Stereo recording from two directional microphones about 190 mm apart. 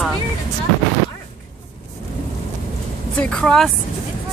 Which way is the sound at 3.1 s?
5° left (ahead or behind).